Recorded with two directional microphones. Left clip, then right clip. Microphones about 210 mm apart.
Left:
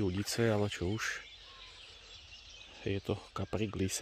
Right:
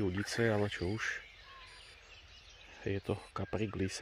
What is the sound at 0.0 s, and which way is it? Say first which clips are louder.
Speech: even; 10° left (ahead or behind).